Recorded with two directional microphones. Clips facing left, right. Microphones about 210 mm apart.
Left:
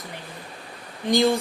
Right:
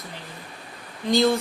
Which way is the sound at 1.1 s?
15° left (ahead or behind).